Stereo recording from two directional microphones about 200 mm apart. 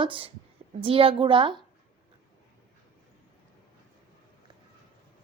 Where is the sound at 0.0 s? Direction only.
25° right (ahead or behind).